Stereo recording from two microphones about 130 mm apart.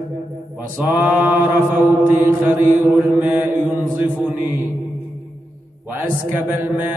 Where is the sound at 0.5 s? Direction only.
10° right (ahead or behind).